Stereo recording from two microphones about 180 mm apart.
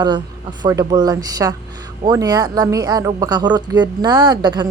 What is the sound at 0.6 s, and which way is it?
Speech, 20° right (ahead or behind).